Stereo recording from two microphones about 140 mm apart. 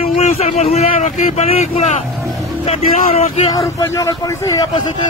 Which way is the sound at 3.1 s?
50° left (ahead or behind).